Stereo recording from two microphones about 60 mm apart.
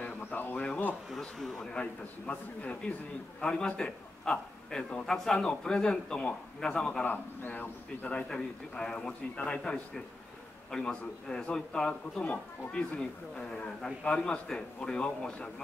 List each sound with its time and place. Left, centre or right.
0.0 s a sound: left
1.4 s a man's voice: centre
1.7 s a man's voice: left
7.0 s a man's voice: left
8.1 s a man's voice: centre
10.7 s a man's voice: centre